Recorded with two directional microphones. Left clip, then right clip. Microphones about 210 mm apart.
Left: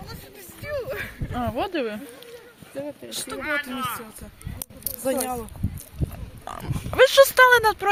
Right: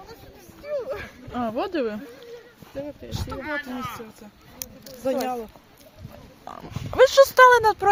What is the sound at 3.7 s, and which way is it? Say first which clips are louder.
Speech: left 4 dB; 55° right (ahead or behind).